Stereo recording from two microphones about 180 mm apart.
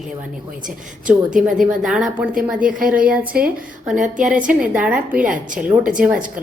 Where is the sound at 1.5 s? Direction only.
Centre (ahead or behind).